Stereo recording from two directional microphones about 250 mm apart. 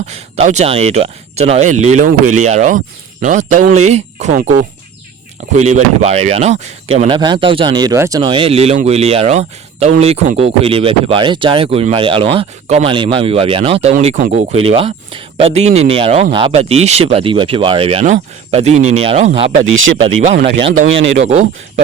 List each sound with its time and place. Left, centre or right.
0.1 s speech: right
19.7 s speech: right
20.4 s speech: right
20.7 s speech: right